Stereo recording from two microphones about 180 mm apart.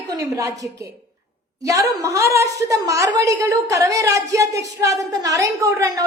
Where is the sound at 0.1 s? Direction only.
20° right (ahead or behind).